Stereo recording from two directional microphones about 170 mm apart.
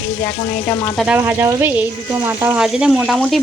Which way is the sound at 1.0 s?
10° right (ahead or behind).